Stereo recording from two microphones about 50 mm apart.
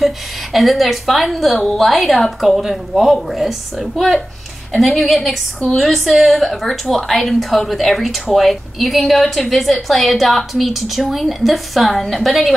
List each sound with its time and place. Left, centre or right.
0.0 s a woman's voice: centre